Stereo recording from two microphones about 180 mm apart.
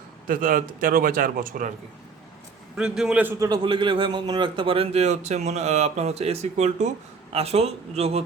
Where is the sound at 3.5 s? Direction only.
25° right (ahead or behind).